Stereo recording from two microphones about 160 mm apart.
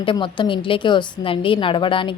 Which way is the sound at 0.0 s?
30° left (ahead or behind).